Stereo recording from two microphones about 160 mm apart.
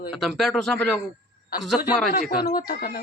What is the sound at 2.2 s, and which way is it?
Speech, 70° left (ahead or behind).